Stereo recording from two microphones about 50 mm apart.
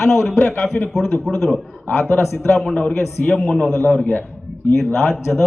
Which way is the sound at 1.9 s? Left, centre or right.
Left.